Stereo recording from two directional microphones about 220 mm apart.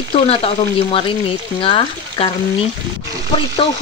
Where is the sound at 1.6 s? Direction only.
25° left (ahead or behind).